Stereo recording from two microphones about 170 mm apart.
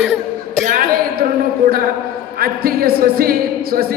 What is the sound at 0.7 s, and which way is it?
Speech, 55° right (ahead or behind).